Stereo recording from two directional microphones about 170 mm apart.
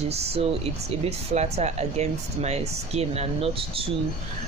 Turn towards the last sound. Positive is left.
turn(degrees=-35)  # may be behind; listen again after turning